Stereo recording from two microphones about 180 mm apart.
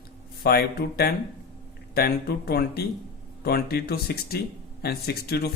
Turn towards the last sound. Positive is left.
turn(degrees=60)  # may be behind; listen again after turning